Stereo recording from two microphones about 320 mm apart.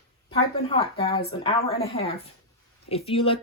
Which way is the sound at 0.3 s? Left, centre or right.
Centre.